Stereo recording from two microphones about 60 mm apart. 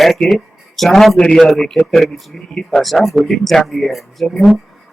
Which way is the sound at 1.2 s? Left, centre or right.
Left.